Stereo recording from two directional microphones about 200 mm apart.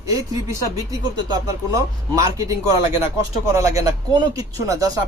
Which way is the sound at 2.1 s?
15° right (ahead or behind).